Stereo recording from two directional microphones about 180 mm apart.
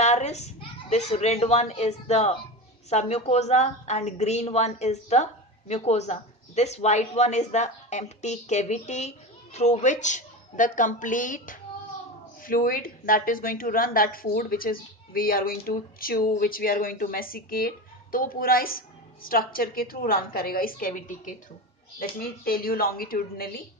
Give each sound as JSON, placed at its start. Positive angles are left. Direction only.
{"t": 0.0, "sound": "a woman's voice", "side_deg": 40}
{"t": 22.2, "sound": "a woman's voice", "side_deg": 55}